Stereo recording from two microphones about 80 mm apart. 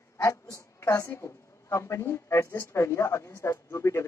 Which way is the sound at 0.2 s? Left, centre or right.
Left.